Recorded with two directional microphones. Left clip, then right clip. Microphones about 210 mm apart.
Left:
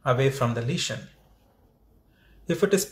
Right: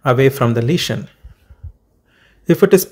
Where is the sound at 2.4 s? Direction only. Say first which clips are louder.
Right 12 dB; 40° right (ahead or behind).